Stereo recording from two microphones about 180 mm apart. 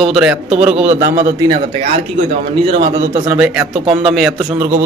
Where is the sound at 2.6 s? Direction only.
30° right (ahead or behind).